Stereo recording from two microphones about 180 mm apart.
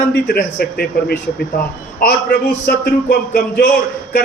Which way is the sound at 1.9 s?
55° left (ahead or behind).